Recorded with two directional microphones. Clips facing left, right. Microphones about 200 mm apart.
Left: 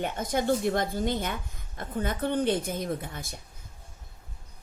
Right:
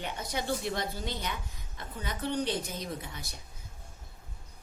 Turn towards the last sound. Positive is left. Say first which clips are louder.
# left 6 dB
turn(degrees=50)  # may be behind; listen again after turning